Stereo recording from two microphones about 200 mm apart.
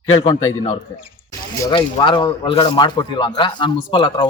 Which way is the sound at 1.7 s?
25° left (ahead or behind).